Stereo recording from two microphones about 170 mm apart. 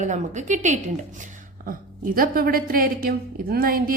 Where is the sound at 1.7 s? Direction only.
55° right (ahead or behind).